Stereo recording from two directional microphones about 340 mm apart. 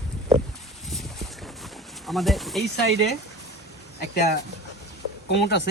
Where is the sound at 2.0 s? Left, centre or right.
Centre.